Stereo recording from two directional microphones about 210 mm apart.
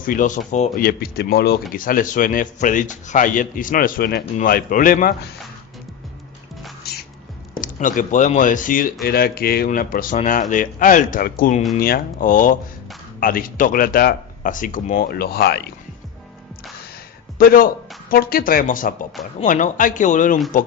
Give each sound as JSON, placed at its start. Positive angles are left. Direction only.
{"t": 0.0, "sound": "a man's voice", "side_deg": 40}
{"t": 7.6, "sound": "a man's voice", "side_deg": 40}
{"t": 17.3, "sound": "a man's voice", "side_deg": 45}